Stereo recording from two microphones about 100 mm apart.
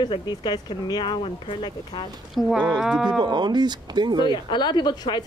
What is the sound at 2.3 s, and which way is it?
Speech, 5° right (ahead or behind).